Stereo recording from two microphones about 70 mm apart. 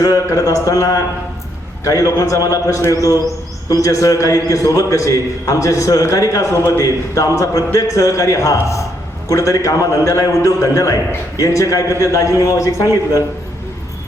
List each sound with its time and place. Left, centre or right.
0.0 s a man's voice: left